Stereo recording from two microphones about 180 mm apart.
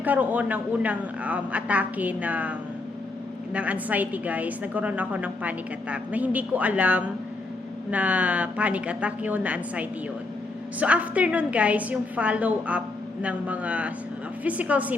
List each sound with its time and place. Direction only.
0.0 s a woman's voice: 10° right (ahead or behind)